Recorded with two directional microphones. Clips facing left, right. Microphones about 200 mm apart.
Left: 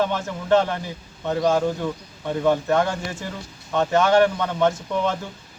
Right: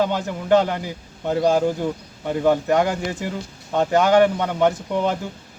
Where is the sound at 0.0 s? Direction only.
15° right (ahead or behind).